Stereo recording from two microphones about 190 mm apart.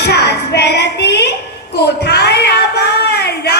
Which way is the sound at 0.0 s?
60° left (ahead or behind).